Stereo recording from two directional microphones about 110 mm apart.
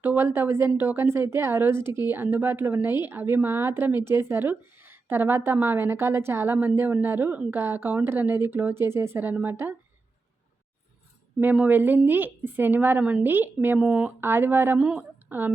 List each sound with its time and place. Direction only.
0.0 s a woman's voice: 20° right (ahead or behind)
11.3 s a woman's voice: 15° right (ahead or behind)
14.2 s a woman's voice: 20° right (ahead or behind)
14.8 s a woman's voice: 5° right (ahead or behind)
15.3 s a woman's voice: 15° right (ahead or behind)